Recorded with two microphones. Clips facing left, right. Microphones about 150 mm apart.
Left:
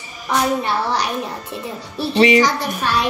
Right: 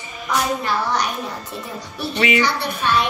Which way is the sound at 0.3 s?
30° left (ahead or behind).